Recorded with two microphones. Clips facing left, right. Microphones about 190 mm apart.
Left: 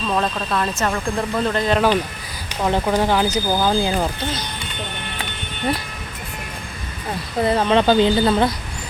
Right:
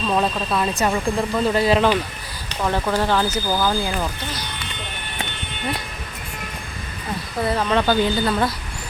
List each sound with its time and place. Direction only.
0.1 s speech: 5° right (ahead or behind)
2.5 s speech: 20° left (ahead or behind)
7.4 s speech: 25° left (ahead or behind)